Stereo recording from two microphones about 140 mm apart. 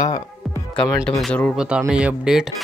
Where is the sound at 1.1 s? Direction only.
5° left (ahead or behind).